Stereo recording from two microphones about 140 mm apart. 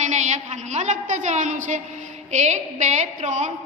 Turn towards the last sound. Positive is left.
turn(degrees=-55)  # may be behind; listen again after turning